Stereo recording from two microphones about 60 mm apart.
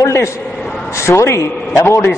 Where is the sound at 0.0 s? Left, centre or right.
Left.